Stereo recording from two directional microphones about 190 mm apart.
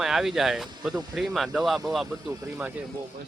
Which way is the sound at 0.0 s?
Centre (ahead or behind).